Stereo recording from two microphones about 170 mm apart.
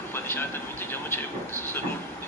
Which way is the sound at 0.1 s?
15° left (ahead or behind).